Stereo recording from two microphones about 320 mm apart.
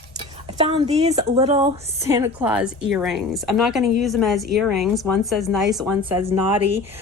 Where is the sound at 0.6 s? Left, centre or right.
Centre.